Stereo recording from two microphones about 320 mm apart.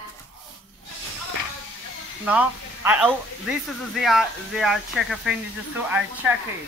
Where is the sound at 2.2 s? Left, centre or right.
Centre.